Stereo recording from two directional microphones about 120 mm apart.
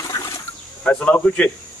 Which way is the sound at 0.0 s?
30° left (ahead or behind).